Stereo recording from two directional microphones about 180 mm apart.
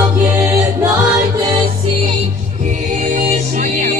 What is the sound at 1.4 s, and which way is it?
Music, 20° right (ahead or behind).